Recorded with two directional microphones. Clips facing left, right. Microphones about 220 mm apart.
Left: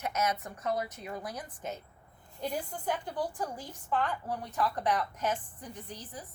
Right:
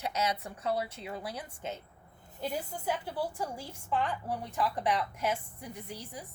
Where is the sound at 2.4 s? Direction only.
5° right (ahead or behind).